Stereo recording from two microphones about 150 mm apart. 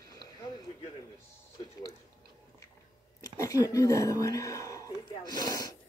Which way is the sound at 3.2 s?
25° left (ahead or behind).